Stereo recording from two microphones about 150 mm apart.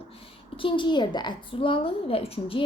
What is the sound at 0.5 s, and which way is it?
A woman's voice, 35° left (ahead or behind).